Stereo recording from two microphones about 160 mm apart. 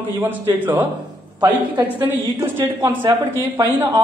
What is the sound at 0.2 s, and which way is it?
A man's voice, 10° right (ahead or behind).